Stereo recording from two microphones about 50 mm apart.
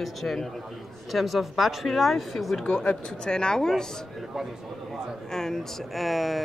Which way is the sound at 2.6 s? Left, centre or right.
Left.